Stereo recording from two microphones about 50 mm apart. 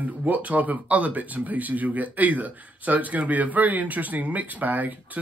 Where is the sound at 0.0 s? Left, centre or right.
Right.